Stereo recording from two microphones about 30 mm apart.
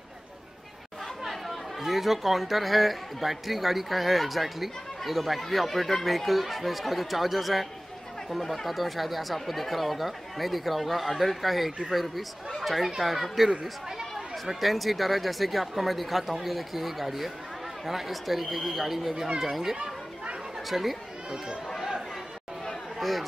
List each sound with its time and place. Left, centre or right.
1.2 s speech: centre
19.1 s speech: right
19.4 s a child's voice: centre
20.7 s speech: centre
21.7 s chatter: centre
22.9 s chatter: centre